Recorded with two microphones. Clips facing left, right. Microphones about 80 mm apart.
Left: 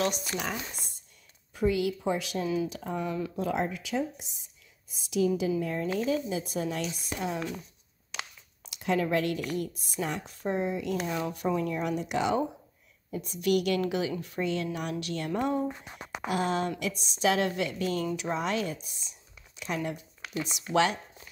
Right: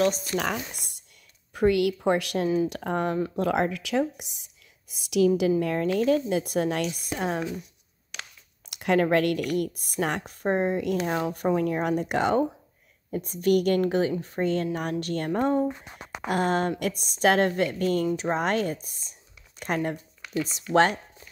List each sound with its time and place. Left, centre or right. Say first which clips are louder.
0.4 s speech: right 6 dB; right
2.4 s speech: right 4 dB; right
2.7 s speech: right 6 dB; right
5.9 s a woman's voice: right 7 dB; right
8.6 s a woman's voice: right 5 dB; right